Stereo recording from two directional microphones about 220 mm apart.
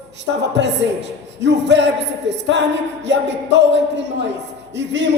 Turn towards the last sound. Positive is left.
turn(degrees=-55)  # may be behind; listen again after turning